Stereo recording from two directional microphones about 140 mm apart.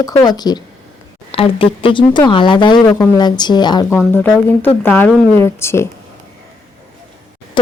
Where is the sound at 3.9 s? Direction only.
15° left (ahead or behind).